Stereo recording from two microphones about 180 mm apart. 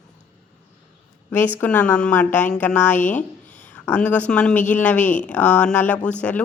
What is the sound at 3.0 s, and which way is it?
Speech, 45° left (ahead or behind).